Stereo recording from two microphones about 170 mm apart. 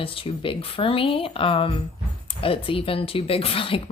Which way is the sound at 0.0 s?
30° left (ahead or behind).